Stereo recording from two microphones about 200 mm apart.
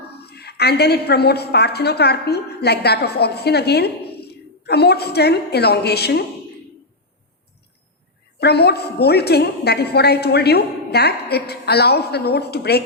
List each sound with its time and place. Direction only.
0.1 s a woman's voice: 55° left (ahead or behind)
8.4 s a woman's voice: 55° left (ahead or behind)